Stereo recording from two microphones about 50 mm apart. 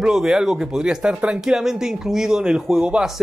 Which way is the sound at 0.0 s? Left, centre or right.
Centre.